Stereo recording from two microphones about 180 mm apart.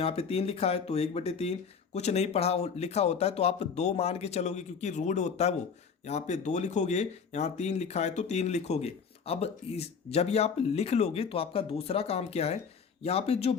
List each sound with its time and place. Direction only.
0.0 s speech: 35° left (ahead or behind)